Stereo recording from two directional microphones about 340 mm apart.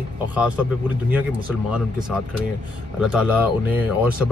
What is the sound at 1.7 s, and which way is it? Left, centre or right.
A man's voice, centre.